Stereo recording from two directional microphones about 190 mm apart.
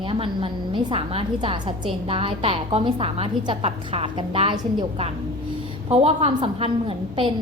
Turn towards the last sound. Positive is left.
turn(degrees=-30)  # may be behind; listen again after turning